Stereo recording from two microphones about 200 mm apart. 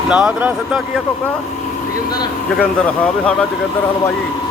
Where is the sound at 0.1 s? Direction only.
5° right (ahead or behind).